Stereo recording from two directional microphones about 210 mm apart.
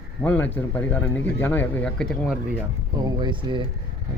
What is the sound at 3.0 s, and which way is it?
Speech, 20° right (ahead or behind).